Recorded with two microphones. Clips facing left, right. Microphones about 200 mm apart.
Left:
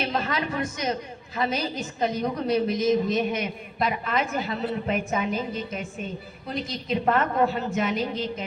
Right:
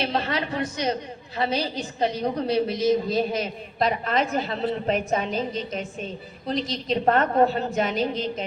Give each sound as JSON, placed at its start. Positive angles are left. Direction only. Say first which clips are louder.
{"t": 0.0, "sound": "a woman's voice", "louder": "right 1 dB", "side_deg": -30}